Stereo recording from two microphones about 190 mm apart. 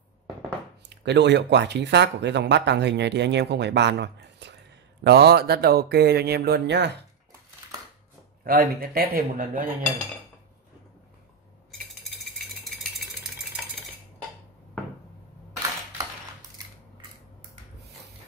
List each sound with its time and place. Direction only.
0.8 s speech: 65° right (ahead or behind)
8.5 s a man's voice: 50° right (ahead or behind)
12.6 s a sound: centre (ahead or behind)